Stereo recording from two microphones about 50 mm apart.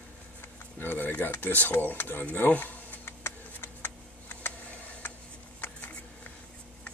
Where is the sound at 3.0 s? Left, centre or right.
Left.